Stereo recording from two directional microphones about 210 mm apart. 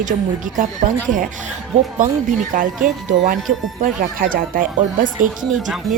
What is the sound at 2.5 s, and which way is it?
A woman's voice, 40° right (ahead or behind).